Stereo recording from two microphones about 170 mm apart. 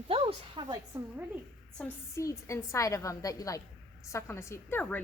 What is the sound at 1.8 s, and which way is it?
A woman's voice, 15° left (ahead or behind).